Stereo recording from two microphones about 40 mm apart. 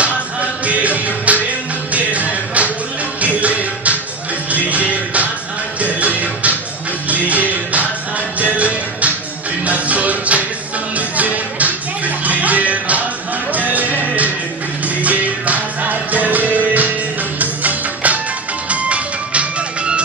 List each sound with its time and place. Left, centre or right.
0.0 s music: right